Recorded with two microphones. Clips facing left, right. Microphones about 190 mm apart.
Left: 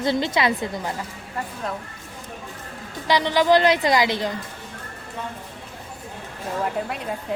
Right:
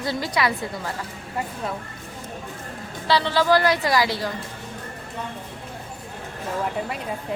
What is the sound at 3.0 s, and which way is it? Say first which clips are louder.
A woman's voice: left 1 dB; 15° left (ahead or behind).